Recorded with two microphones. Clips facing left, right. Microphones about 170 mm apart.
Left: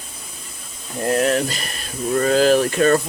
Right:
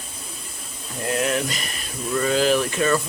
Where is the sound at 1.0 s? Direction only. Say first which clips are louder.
Left 5 dB; 40° left (ahead or behind).